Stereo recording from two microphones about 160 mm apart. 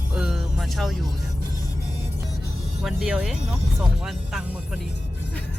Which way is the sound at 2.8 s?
5° right (ahead or behind).